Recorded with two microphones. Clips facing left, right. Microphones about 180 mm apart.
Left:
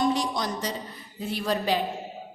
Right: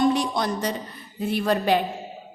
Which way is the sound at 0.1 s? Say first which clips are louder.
Right 3 dB; 60° right (ahead or behind).